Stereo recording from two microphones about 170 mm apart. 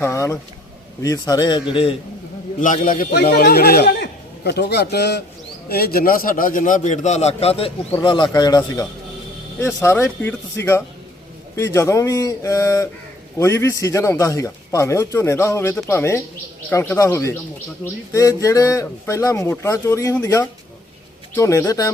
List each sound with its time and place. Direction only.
0.0 s a man's voice: 15° left (ahead or behind); by 2.0 s 30° left (ahead or behind)
2.6 s a man's voice: 50° left (ahead or behind)
3.2 s a man's voice: 65° left (ahead or behind)
5.6 s a man's voice: 65° left (ahead or behind); by 21.9 s 20° left (ahead or behind)